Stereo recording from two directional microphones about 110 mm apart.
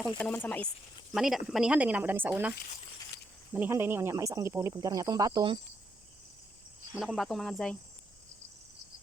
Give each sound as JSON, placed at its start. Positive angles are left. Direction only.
{"t": 0.2, "sound": "speech", "side_deg": 15}
{"t": 1.1, "sound": "speech", "side_deg": -5}
{"t": 4.7, "sound": "speech", "side_deg": -35}
{"t": 6.9, "sound": "speech", "side_deg": 0}